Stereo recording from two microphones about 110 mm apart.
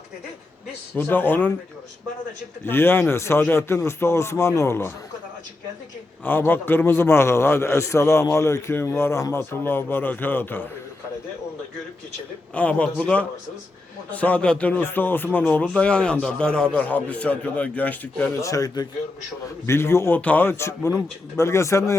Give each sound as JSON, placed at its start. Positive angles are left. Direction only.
{"t": 0.9, "sound": "speech", "side_deg": 15}
{"t": 2.6, "sound": "a man's voice", "side_deg": 20}
{"t": 6.2, "sound": "a man's voice", "side_deg": 20}
{"t": 12.5, "sound": "speech", "side_deg": 10}
{"t": 18.3, "sound": "speech", "side_deg": 30}
{"t": 19.6, "sound": "a man's voice", "side_deg": 25}